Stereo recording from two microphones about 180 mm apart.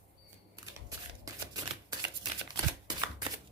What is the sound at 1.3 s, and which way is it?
Shuffling cards, 20° right (ahead or behind).